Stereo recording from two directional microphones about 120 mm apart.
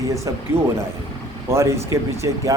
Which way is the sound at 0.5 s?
20° right (ahead or behind).